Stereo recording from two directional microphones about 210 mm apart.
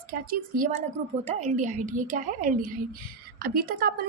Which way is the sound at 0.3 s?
40° right (ahead or behind).